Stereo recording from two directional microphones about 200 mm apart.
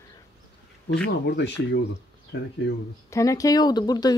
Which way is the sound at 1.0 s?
60° left (ahead or behind).